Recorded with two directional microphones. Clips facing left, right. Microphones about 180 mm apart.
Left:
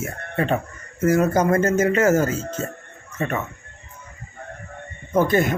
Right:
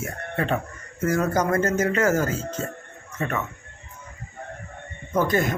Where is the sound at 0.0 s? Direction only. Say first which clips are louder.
Left 3 dB; 25° left (ahead or behind).